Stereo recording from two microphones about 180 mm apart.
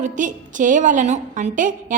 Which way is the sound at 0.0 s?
45° right (ahead or behind).